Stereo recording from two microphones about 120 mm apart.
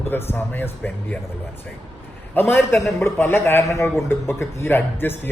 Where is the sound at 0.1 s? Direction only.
20° left (ahead or behind).